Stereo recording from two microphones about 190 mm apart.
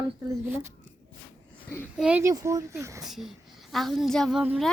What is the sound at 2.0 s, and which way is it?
Speech, 10° right (ahead or behind).